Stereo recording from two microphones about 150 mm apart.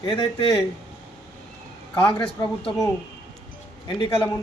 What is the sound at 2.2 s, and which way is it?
Speech, 35° left (ahead or behind).